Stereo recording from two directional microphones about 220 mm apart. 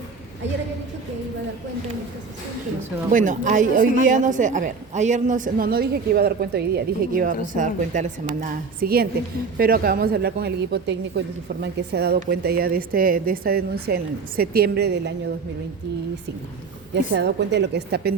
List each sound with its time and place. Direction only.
3.1 s a woman's voice: 35° right (ahead or behind)
16.9 s a woman's voice: 50° right (ahead or behind)